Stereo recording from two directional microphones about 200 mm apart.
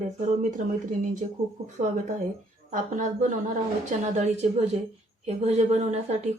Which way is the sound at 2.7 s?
40° right (ahead or behind).